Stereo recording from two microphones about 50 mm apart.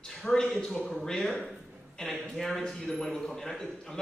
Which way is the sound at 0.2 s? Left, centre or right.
Centre.